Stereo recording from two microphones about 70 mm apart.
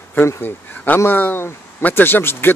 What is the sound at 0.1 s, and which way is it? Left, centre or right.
Speech, left.